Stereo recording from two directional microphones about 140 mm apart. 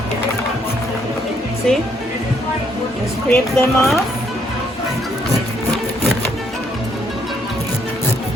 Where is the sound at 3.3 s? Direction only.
15° left (ahead or behind).